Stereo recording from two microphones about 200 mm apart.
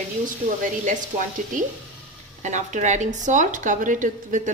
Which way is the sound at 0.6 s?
40° right (ahead or behind).